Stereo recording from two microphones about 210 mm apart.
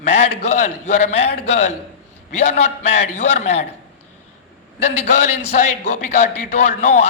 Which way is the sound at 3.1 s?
30° left (ahead or behind).